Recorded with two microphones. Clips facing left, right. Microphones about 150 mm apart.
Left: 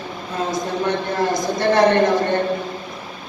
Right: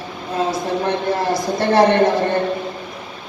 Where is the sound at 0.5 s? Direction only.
30° right (ahead or behind).